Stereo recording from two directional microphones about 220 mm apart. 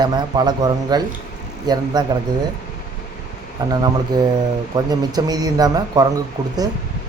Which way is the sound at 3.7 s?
15° right (ahead or behind).